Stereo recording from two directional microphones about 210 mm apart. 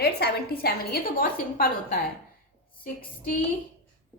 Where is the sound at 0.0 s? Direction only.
50° left (ahead or behind).